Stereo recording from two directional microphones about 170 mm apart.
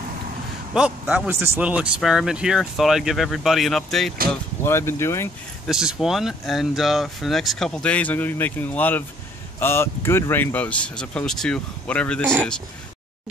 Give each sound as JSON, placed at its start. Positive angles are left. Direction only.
{"t": 0.7, "sound": "speech", "side_deg": -5}
{"t": 4.6, "sound": "speech", "side_deg": 15}
{"t": 5.7, "sound": "speech", "side_deg": -5}